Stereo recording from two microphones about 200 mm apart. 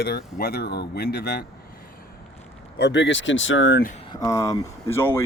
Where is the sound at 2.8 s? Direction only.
60° left (ahead or behind).